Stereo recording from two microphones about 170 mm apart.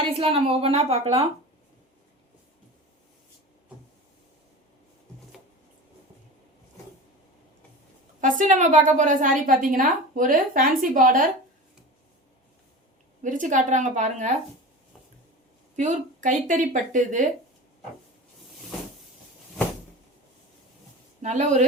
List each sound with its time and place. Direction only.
0.0 s a woman's voice: 35° right (ahead or behind)
8.2 s a woman's voice: 45° right (ahead or behind)
13.2 s a woman's voice: 50° right (ahead or behind)
15.7 s a woman's voice: 45° right (ahead or behind)
21.2 s speech: 45° right (ahead or behind)